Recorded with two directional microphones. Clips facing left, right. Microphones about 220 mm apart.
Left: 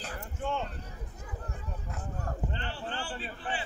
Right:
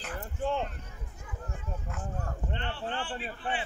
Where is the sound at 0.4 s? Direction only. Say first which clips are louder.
Right 3 dB; 35° right (ahead or behind).